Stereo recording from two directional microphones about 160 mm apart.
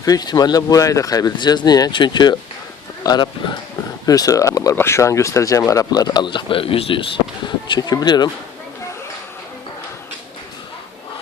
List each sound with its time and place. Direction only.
0.0 s speech: 25° left (ahead or behind)